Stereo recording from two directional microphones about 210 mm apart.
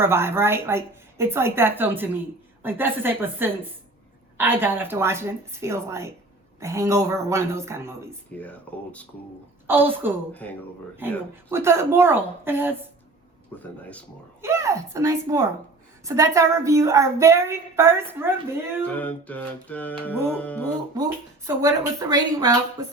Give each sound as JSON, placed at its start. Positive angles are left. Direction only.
{"t": 0.0, "sound": "a woman's voice", "side_deg": -10}
{"t": 8.4, "sound": "music", "side_deg": 5}
{"t": 9.6, "sound": "a woman's voice", "side_deg": -10}
{"t": 10.4, "sound": "music", "side_deg": 5}
{"t": 11.5, "sound": "a woman's voice", "side_deg": -10}
{"t": 13.6, "sound": "music", "side_deg": 5}
{"t": 14.4, "sound": "a woman's voice", "side_deg": -15}
{"t": 18.9, "sound": "music", "side_deg": 5}
{"t": 20.9, "sound": "a woman's voice", "side_deg": -15}